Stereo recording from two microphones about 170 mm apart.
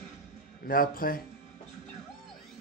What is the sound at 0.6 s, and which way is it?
Speech, 60° left (ahead or behind).